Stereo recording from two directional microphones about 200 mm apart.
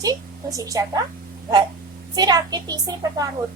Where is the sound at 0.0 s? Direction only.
15° right (ahead or behind).